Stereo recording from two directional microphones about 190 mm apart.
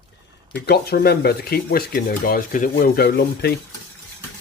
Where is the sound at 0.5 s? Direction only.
60° left (ahead or behind).